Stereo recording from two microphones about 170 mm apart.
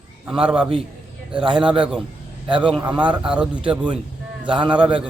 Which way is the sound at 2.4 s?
30° right (ahead or behind).